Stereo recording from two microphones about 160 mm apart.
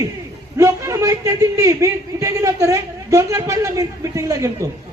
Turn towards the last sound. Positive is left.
turn(degrees=-20)  # may be behind; listen again after turning